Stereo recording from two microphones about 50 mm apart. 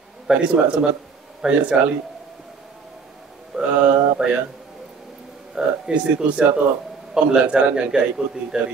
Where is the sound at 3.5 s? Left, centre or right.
Centre.